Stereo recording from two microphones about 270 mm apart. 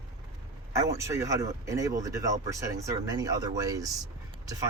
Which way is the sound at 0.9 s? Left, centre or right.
Centre.